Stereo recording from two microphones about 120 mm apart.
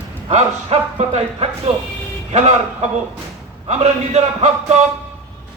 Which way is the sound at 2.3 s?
70° right (ahead or behind).